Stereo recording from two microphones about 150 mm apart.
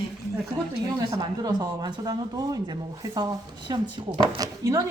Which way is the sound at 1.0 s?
25° right (ahead or behind).